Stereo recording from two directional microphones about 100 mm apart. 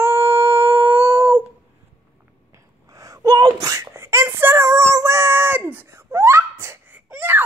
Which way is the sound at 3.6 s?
30° right (ahead or behind).